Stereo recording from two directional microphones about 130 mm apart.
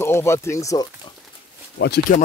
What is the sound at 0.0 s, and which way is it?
Speech, 20° left (ahead or behind).